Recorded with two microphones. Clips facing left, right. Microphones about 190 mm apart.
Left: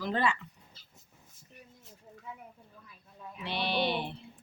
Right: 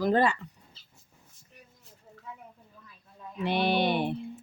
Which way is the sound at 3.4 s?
50° right (ahead or behind).